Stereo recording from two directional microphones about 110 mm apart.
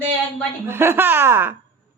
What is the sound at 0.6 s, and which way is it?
Speech, 20° right (ahead or behind).